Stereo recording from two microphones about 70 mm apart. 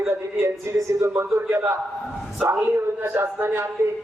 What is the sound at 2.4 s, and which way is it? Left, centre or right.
Speech, centre.